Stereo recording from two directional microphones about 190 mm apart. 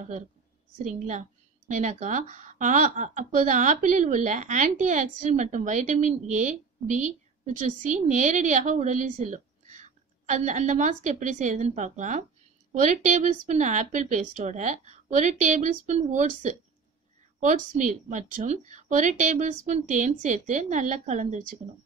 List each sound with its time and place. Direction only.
0.8 s a woman's voice: 40° right (ahead or behind)